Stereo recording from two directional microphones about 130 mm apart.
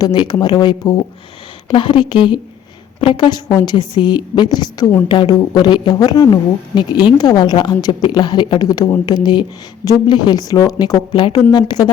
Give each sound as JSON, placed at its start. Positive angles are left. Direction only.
{"t": 0.0, "sound": "speech", "side_deg": 35}